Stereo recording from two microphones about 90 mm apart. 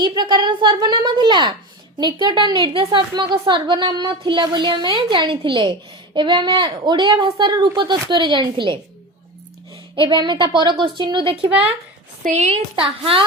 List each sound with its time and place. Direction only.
0.0 s a woman's voice: 55° right (ahead or behind)
9.9 s a woman's voice: 65° right (ahead or behind)
12.8 s a woman's voice: 75° right (ahead or behind)